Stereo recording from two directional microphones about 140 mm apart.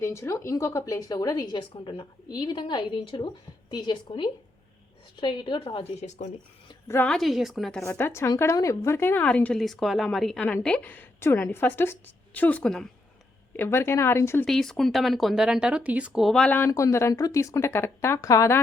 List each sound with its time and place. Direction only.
0.0 s a woman's voice: 20° left (ahead or behind); by 6.1 s 40° left (ahead or behind)
6.8 s a woman's voice: 15° left (ahead or behind)
7.1 s speech: centre (ahead or behind)
7.8 s speech: 20° left (ahead or behind)
13.5 s speech: 15° left (ahead or behind)
14.4 s speech: 5° left (ahead or behind)
16.6 s speech: 20° left (ahead or behind)